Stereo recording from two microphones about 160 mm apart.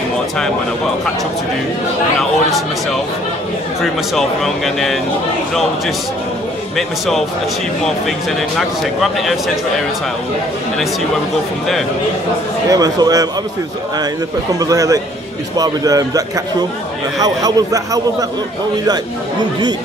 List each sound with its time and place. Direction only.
3.8 s speech: centre (ahead or behind)
12.6 s a man's voice: 25° right (ahead or behind)
14.6 s a man's voice: 20° right (ahead or behind)